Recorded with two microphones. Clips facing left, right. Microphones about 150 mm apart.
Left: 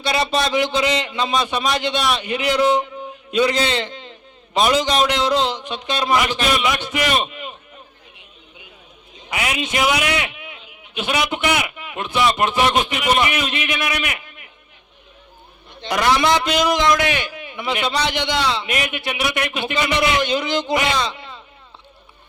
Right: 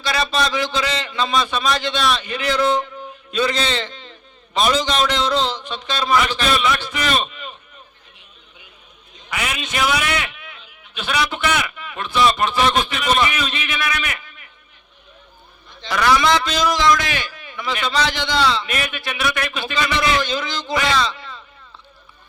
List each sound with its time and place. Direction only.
0.0 s a man's voice: 20° left (ahead or behind)
9.3 s a man's voice: 15° left (ahead or behind)
15.9 s a man's voice: 25° left (ahead or behind)